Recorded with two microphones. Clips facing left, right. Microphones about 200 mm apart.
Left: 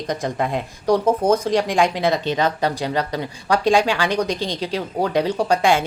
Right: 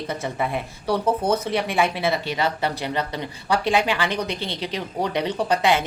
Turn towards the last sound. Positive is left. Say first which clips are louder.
# left 3 dB
turn(degrees=10)  # may be behind; listen again after turning